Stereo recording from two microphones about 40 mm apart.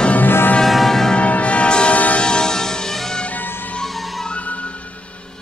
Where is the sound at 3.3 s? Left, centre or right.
Left.